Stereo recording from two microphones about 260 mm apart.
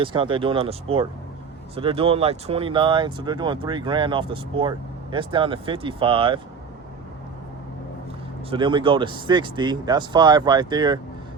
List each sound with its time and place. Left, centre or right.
0.0 s speech: centre
8.4 s speech: centre